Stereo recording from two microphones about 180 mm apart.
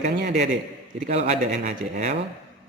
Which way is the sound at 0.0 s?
40° right (ahead or behind).